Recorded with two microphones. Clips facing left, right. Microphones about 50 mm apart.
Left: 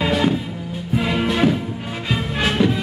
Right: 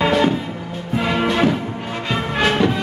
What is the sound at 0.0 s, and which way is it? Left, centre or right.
Music, centre.